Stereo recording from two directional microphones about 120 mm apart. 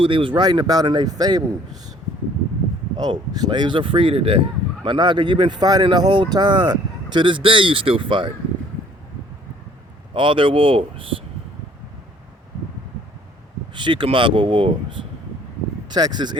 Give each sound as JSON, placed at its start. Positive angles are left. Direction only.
{"t": 0.0, "sound": "speech", "side_deg": -45}
{"t": 3.0, "sound": "speech", "side_deg": -35}
{"t": 10.2, "sound": "speech", "side_deg": -45}
{"t": 13.7, "sound": "speech", "side_deg": -40}